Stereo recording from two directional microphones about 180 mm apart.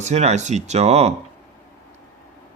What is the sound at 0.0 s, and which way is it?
Speech, 40° right (ahead or behind).